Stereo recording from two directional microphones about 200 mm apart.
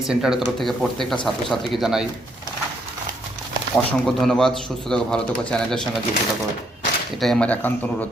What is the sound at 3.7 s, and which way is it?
Speech, centre (ahead or behind).